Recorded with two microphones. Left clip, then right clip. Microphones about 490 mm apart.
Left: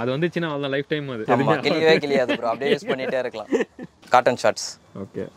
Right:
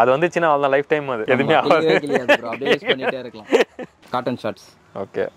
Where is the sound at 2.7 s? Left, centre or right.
Right.